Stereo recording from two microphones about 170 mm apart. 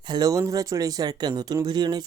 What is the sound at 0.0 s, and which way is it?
Speech, 25° right (ahead or behind).